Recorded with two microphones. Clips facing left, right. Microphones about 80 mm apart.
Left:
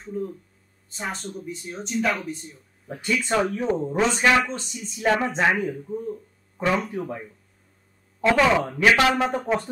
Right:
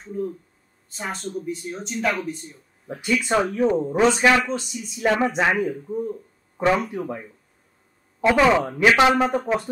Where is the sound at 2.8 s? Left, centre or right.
Centre.